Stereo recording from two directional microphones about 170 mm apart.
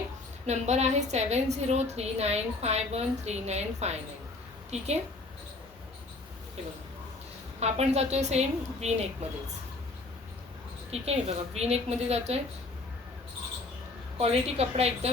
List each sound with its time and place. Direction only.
0.4 s a woman's voice: 40° right (ahead or behind)
7.6 s a woman's voice: 40° right (ahead or behind)
10.9 s a woman's voice: 40° right (ahead or behind)
14.2 s a woman's voice: 35° right (ahead or behind)